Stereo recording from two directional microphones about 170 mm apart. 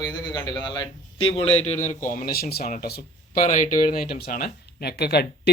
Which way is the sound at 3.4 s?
50° left (ahead or behind).